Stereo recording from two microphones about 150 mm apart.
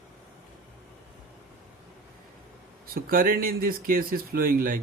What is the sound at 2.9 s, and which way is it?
Speech, 70° right (ahead or behind).